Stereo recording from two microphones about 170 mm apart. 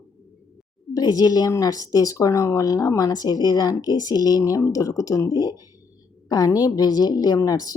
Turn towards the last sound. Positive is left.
turn(degrees=20)  # may be behind; listen again after turning